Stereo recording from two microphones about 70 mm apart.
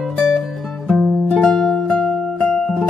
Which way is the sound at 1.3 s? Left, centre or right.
Centre.